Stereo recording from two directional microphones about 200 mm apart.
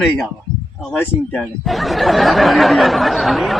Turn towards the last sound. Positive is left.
turn(degrees=0)  # may be behind; listen again after turning